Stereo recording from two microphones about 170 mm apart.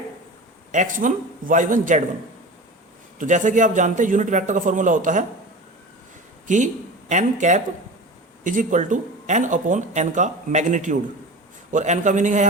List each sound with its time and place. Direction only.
0.7 s speech: 50° right (ahead or behind)
3.2 s speech: 45° right (ahead or behind)
7.1 s speech: 45° right (ahead or behind)